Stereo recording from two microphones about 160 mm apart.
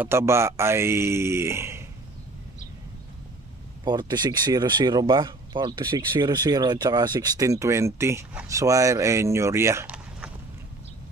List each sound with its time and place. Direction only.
0.0 s speech: 15° right (ahead or behind)
3.8 s speech: 25° right (ahead or behind)